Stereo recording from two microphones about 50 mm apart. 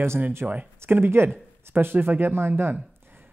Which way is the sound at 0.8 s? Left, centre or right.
Right.